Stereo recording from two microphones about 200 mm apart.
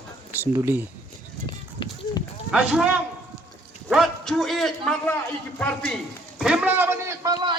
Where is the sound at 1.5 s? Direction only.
25° left (ahead or behind).